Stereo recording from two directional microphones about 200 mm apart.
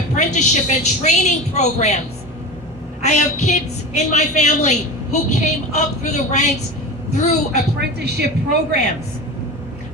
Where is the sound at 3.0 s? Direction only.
35° left (ahead or behind).